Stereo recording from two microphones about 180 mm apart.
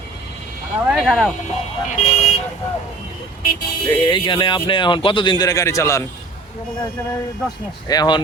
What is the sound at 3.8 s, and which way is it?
Speech, 25° left (ahead or behind).